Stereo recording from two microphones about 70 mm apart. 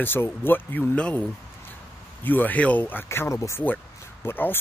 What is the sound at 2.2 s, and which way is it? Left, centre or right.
Speech, left.